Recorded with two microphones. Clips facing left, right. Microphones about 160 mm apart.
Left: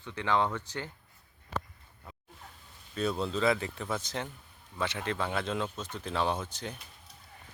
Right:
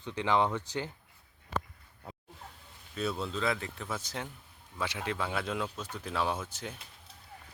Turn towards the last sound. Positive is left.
turn(degrees=-5)  # may be behind; listen again after turning